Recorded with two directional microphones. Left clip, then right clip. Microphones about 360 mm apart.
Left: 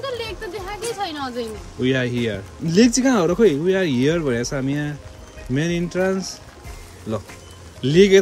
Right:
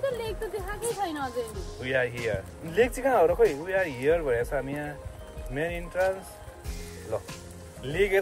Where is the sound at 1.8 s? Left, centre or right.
Centre.